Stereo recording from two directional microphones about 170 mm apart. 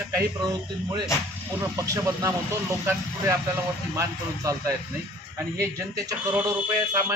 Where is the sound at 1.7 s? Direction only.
20° right (ahead or behind).